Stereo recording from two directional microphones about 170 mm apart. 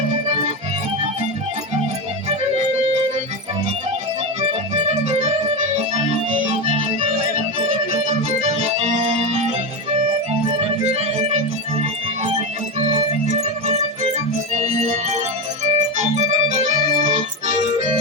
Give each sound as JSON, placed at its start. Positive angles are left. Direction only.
{"t": 4.4, "sound": "music", "side_deg": -40}
{"t": 6.1, "sound": "organ", "side_deg": -40}
{"t": 8.4, "sound": "music", "side_deg": -40}
{"t": 10.6, "sound": "music", "side_deg": -40}